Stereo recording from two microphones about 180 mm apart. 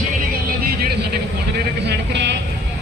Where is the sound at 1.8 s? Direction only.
70° right (ahead or behind).